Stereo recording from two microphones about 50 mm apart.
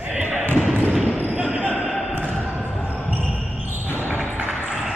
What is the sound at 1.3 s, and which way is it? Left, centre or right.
Basketball bounce, right.